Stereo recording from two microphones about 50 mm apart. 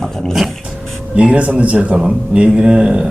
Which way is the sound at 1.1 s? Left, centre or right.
Right.